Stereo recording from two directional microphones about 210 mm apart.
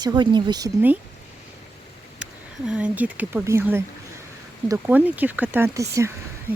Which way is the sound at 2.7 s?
5° right (ahead or behind).